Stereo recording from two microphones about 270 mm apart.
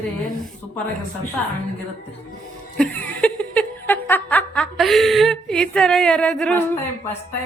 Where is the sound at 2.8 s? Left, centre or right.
Centre.